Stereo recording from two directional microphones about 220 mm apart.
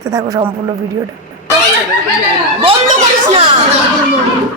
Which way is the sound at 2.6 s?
30° right (ahead or behind).